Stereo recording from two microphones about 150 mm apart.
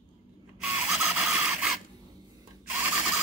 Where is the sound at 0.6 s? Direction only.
5° right (ahead or behind).